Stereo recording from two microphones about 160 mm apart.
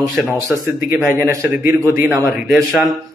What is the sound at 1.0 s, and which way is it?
A man's voice, 15° right (ahead or behind).